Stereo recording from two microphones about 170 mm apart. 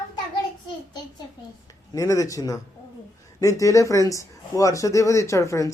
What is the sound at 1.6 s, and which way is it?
Speech, 20° left (ahead or behind).